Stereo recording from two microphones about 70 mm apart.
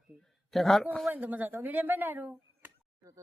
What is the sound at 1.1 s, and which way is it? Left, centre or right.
Speech, right.